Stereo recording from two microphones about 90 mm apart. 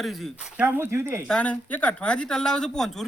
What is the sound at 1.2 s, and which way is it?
Speech, 15° left (ahead or behind).